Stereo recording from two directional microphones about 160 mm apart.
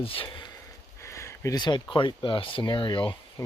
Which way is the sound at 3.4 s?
20° left (ahead or behind).